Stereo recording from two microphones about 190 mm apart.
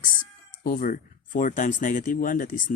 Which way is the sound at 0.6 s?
45° left (ahead or behind).